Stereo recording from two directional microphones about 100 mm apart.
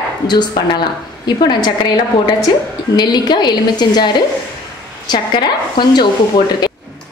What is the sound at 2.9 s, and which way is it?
A woman's voice, 45° left (ahead or behind).